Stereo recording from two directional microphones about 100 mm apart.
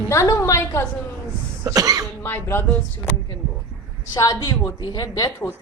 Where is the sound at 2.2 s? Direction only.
20° left (ahead or behind).